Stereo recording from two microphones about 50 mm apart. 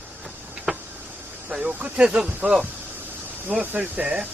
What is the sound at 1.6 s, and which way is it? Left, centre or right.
Speech, right.